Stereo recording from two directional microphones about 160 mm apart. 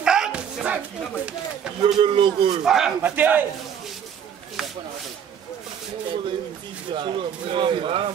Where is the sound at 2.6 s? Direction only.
5° right (ahead or behind).